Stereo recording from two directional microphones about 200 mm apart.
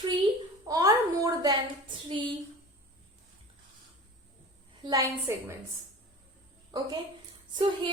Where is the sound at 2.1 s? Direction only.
25° right (ahead or behind).